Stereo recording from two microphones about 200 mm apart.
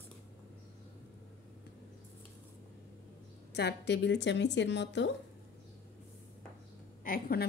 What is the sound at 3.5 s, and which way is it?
A woman's voice, 55° left (ahead or behind).